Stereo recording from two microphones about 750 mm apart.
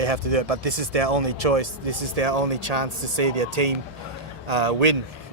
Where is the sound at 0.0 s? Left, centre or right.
Right.